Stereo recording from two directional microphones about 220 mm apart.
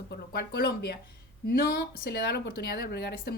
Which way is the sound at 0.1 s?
45° left (ahead or behind).